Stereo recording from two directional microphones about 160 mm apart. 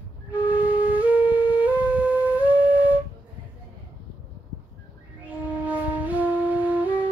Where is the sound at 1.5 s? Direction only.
10° right (ahead or behind).